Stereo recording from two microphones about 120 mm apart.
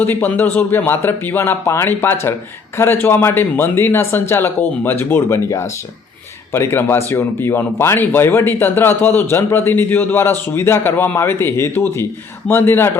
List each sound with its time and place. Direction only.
0.0 s speech: 15° left (ahead or behind)